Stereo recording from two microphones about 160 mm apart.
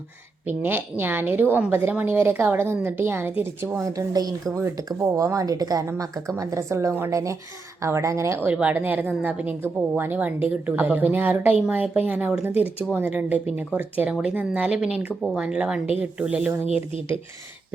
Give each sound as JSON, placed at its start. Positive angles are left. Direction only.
{"t": 0.4, "sound": "a woman's voice", "side_deg": -10}